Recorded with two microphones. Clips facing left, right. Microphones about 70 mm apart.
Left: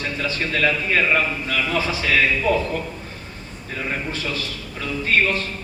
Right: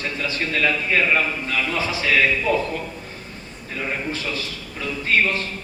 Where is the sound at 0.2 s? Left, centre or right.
Left.